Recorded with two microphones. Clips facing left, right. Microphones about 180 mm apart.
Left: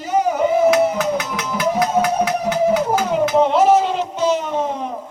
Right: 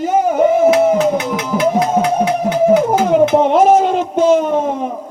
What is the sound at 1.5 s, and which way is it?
Music, 25° right (ahead or behind).